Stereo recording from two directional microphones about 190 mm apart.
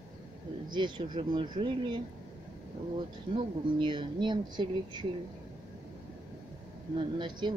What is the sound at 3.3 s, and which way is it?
Speech, 25° right (ahead or behind).